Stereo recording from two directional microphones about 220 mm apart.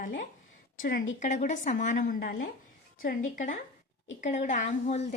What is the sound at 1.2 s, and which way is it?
A woman's voice, 35° left (ahead or behind).